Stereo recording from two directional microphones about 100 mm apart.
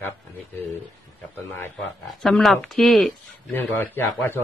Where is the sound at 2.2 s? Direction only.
Centre (ahead or behind).